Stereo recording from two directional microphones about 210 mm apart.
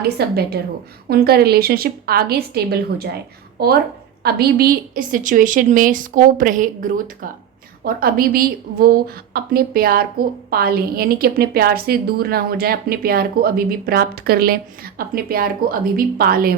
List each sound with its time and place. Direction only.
0.2 s a woman's voice: 50° right (ahead or behind)